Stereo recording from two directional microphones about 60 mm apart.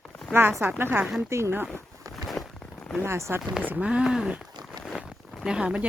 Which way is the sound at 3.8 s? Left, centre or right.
Centre.